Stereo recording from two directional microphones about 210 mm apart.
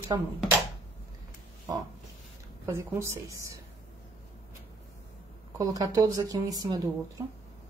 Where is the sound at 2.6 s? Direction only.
10° right (ahead or behind).